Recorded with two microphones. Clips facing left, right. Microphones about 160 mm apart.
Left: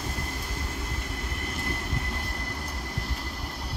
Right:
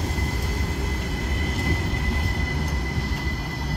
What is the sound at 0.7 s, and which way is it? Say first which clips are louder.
Vehicle: right 6 dB; 70° right (ahead or behind).